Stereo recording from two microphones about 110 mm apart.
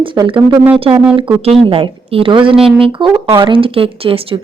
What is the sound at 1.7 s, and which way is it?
A woman's voice, 55° right (ahead or behind).